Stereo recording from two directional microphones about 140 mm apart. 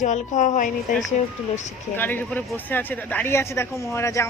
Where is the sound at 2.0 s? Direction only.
15° left (ahead or behind).